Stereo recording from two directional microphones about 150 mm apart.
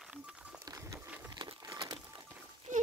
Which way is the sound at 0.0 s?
5° right (ahead or behind).